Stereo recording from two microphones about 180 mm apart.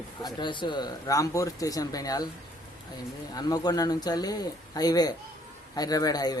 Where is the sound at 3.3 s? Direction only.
20° left (ahead or behind).